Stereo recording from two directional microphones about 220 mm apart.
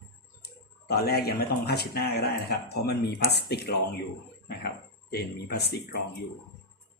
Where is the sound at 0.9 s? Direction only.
45° left (ahead or behind).